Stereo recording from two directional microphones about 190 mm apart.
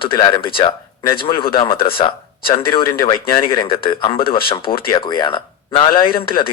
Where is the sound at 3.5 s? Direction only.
30° left (ahead or behind).